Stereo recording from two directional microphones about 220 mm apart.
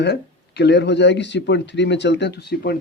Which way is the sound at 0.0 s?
50° left (ahead or behind).